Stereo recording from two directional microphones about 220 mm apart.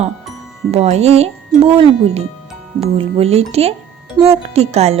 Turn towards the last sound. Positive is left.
turn(degrees=-30)  # may be behind; listen again after turning